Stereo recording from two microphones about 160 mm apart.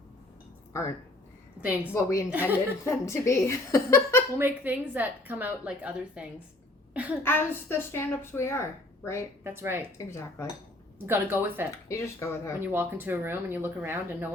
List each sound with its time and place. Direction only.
0.7 s a child's voice: 20° left (ahead or behind)
1.6 s a woman's voice: 10° right (ahead or behind)
1.9 s a woman's voice: 20° left (ahead or behind)
4.4 s a woman's voice: 10° right (ahead or behind)
7.2 s a child's voice: 15° left (ahead or behind)
9.4 s a woman's voice: 15° right (ahead or behind)
10.0 s a child's voice: 15° left (ahead or behind)
11.0 s a woman's voice: 15° right (ahead or behind)
11.9 s a child's voice: 20° left (ahead or behind)
12.5 s a woman's voice: 15° right (ahead or behind)